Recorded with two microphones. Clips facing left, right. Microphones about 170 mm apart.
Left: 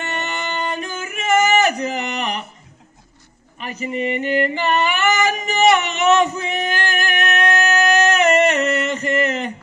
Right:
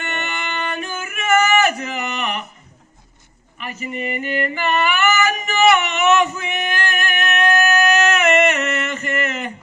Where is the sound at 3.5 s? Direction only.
30° left (ahead or behind).